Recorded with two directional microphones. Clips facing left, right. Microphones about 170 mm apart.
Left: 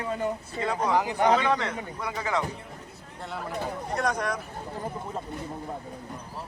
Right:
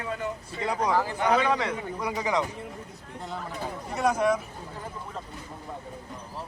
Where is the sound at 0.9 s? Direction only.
15° left (ahead or behind).